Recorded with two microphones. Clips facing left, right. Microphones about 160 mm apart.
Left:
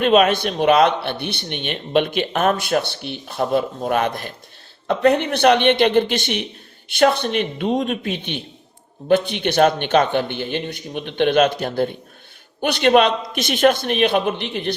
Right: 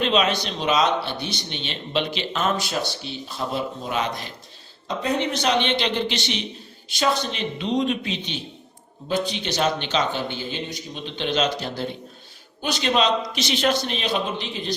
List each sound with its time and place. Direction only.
0.0 s speech: 50° left (ahead or behind)